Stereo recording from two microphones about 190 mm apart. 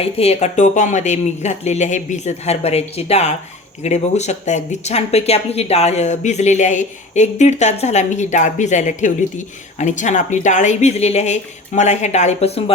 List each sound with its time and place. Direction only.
0.0 s speech: 30° left (ahead or behind)